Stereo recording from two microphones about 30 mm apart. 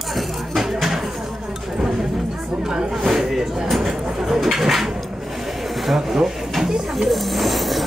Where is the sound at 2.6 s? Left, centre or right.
Right.